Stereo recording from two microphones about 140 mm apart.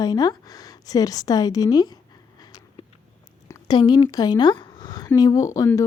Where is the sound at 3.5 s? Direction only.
30° left (ahead or behind).